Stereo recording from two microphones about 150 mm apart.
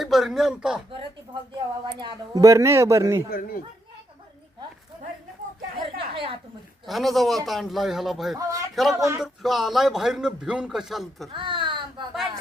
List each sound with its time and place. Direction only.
0.0 s speech: centre (ahead or behind)
2.0 s speech: 25° right (ahead or behind)
3.2 s a man's voice: 80° left
5.8 s a sound: 35° right (ahead or behind)
6.8 s a man's voice: centre (ahead or behind)
8.4 s speech: 25° right (ahead or behind)
8.7 s a man's voice: centre (ahead or behind)
9.0 s speech: 20° right (ahead or behind)
9.2 s a man's voice: centre (ahead or behind)
11.3 s a sound: 35° right (ahead or behind)